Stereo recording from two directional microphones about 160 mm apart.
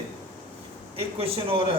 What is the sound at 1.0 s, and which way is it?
Speech, 35° right (ahead or behind).